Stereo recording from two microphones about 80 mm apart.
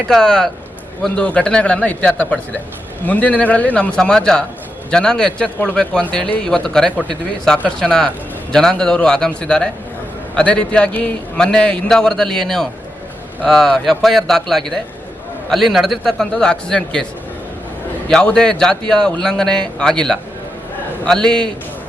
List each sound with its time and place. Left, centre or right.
0.1 s a man's voice: centre
18.1 s a man's voice: centre